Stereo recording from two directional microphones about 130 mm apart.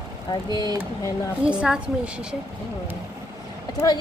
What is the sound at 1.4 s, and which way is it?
Speech, 5° right (ahead or behind).